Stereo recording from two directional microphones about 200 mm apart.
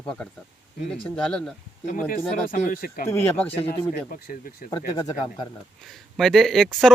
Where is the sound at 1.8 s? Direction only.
40° left (ahead or behind).